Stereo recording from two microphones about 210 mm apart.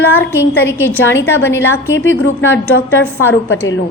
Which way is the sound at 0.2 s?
10° left (ahead or behind).